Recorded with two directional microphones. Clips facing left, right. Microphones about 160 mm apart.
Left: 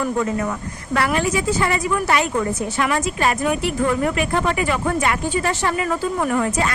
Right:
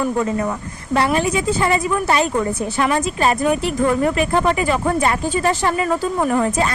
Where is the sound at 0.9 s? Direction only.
25° right (ahead or behind).